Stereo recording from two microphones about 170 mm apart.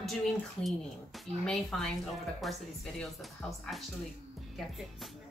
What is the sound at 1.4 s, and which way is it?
Speech, centre (ahead or behind).